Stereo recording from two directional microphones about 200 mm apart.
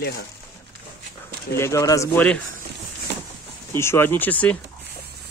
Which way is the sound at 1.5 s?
15° left (ahead or behind).